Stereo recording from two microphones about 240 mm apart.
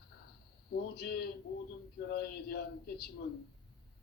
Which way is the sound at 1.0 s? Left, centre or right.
Left.